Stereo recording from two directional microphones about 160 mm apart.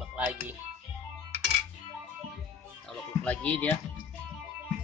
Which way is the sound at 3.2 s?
10° left (ahead or behind).